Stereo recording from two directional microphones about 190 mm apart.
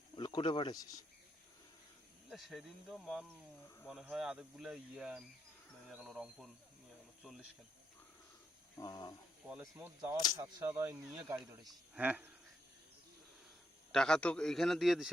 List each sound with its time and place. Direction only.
0.2 s speech: 25° left (ahead or behind)
2.3 s cricket: centre (ahead or behind)
8.8 s speech: 20° left (ahead or behind)
9.7 s speech: 15° right (ahead or behind)
13.9 s cricket: 5° left (ahead or behind)